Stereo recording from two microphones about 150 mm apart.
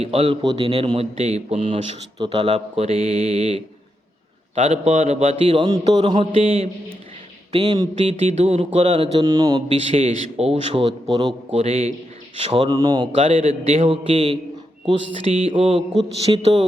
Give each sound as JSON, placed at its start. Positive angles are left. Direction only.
{"t": 0.0, "sound": "a man's voice", "side_deg": -45}
{"t": 7.5, "sound": "speech", "side_deg": -30}
{"t": 7.9, "sound": "a man's voice", "side_deg": -45}
{"t": 9.9, "sound": "a man's voice", "side_deg": -45}
{"t": 12.7, "sound": "speech", "side_deg": -25}
{"t": 13.1, "sound": "a man's voice", "side_deg": -40}